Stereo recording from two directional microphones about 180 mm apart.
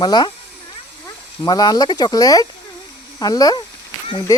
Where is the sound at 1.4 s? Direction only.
20° left (ahead or behind).